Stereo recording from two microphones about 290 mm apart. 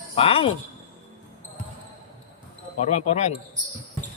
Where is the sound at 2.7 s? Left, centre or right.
Left.